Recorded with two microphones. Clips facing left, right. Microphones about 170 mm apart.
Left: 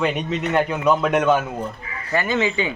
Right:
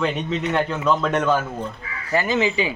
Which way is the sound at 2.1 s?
15° right (ahead or behind).